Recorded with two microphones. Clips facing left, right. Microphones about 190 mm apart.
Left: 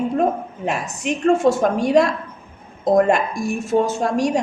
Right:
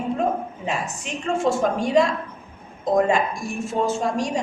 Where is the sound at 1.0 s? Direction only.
65° left (ahead or behind).